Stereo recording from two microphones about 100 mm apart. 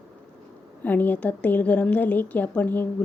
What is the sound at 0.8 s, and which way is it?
A woman's voice, 15° left (ahead or behind).